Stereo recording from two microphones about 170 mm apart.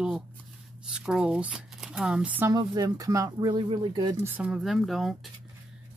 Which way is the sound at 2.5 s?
20° right (ahead or behind).